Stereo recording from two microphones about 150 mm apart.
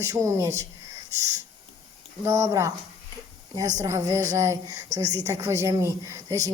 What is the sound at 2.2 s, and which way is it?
A woman's voice, 20° right (ahead or behind).